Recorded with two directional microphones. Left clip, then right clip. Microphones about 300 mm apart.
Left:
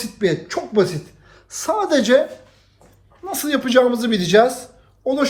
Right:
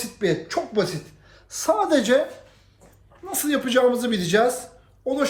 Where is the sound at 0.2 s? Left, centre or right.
Left.